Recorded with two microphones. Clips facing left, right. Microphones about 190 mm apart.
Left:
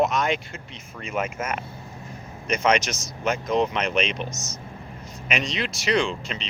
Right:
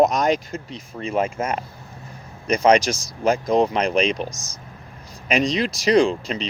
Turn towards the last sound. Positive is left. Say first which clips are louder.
# right 7 dB
turn(degrees=-35)  # may be behind; listen again after turning